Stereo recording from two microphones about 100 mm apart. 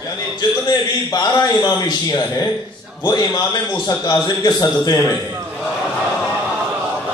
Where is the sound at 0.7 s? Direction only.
45° left (ahead or behind).